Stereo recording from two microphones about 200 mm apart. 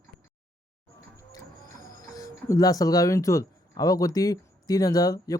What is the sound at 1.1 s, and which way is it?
Speech, 20° left (ahead or behind).